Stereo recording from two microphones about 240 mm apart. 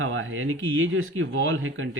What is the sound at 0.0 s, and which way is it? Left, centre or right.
Speech, right.